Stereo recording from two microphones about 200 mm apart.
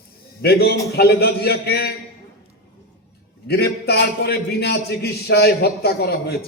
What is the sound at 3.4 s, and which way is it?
A man's voice, 55° left (ahead or behind).